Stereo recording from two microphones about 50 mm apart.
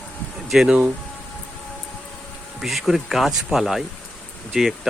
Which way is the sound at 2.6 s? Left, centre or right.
Centre.